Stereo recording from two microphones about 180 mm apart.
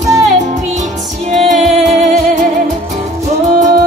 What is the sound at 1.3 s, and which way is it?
Music, 40° right (ahead or behind).